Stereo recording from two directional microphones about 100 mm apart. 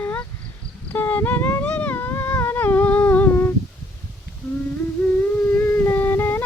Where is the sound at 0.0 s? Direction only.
20° left (ahead or behind).